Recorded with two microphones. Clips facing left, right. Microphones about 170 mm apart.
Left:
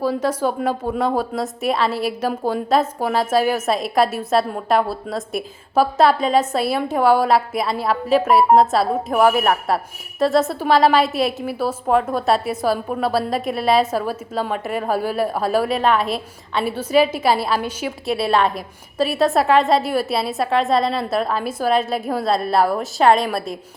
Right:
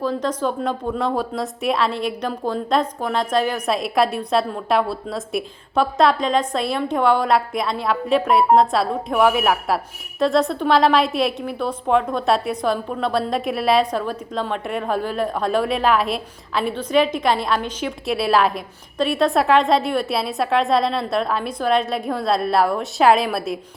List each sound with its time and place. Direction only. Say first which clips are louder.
0.0 s a woman's voice: left 2 dB; 10° left (ahead or behind)